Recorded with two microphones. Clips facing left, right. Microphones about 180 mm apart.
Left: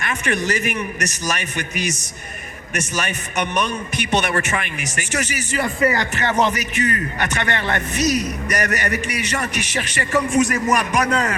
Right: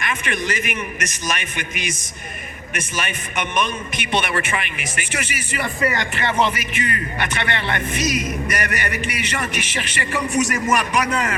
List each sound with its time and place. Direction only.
0.0 s speech: 40° left (ahead or behind)